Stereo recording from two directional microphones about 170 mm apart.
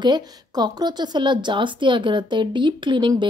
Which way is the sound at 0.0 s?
25° right (ahead or behind).